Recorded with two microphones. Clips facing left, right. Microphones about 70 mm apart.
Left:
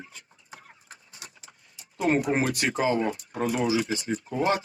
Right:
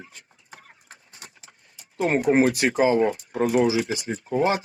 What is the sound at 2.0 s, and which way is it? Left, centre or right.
Speech, right.